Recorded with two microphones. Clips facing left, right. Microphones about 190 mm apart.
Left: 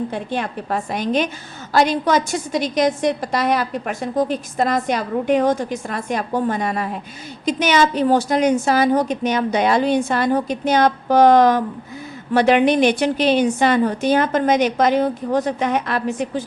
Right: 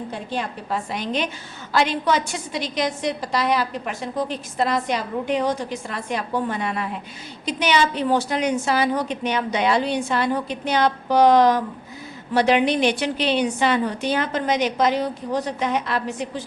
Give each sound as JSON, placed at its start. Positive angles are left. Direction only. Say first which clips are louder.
{"t": 0.1, "sound": "a woman's voice", "louder": "left 4 dB", "side_deg": 55}